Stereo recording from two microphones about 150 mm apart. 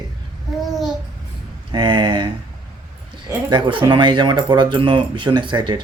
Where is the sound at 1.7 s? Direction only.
30° right (ahead or behind).